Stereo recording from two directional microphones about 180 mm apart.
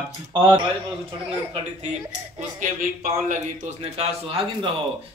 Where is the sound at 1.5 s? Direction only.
35° right (ahead or behind).